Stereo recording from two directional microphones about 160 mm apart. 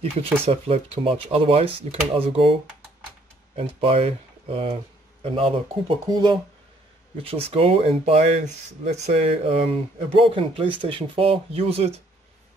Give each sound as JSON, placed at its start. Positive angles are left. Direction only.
{"t": 0.0, "sound": "speech", "side_deg": -40}
{"t": 3.8, "sound": "speech", "side_deg": -35}
{"t": 6.0, "sound": "speech", "side_deg": -25}
{"t": 7.2, "sound": "speech", "side_deg": -35}
{"t": 10.0, "sound": "speech", "side_deg": -35}